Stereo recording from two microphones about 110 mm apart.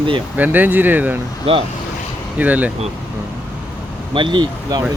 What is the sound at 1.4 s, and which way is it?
Speech, 55° right (ahead or behind).